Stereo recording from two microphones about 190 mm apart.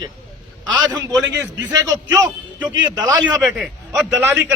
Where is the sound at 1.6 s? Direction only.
15° right (ahead or behind).